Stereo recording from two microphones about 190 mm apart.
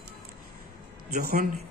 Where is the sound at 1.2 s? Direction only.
50° right (ahead or behind).